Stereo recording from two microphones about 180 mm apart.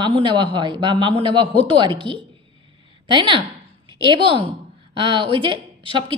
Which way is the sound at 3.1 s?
30° right (ahead or behind).